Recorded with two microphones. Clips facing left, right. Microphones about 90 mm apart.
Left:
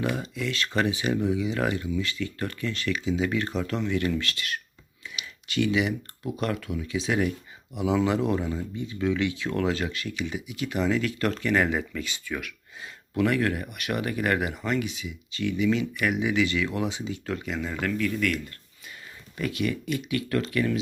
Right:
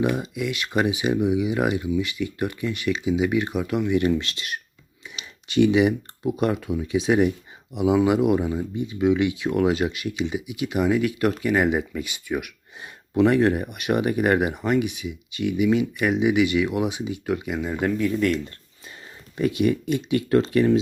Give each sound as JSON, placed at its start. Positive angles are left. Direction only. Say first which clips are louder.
{"t": 0.0, "sound": "speech", "louder": "right 5 dB", "side_deg": -15}
{"t": 5.0, "sound": "a sound", "louder": "even", "side_deg": -15}
{"t": 5.5, "sound": "speech", "louder": "right 7 dB", "side_deg": -20}